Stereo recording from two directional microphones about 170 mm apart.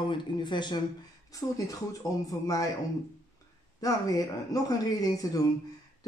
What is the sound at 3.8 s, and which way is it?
Speech, 20° left (ahead or behind).